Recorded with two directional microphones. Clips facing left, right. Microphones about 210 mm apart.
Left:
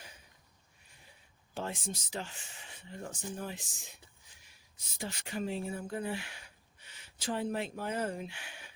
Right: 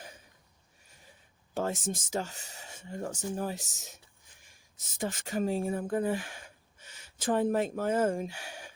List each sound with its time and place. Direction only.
1.5 s speech: 45° right (ahead or behind)